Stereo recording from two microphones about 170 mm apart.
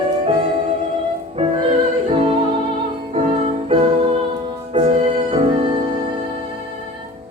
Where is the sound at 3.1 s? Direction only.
35° right (ahead or behind).